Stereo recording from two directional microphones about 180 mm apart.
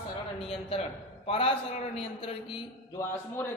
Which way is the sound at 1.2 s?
30° left (ahead or behind).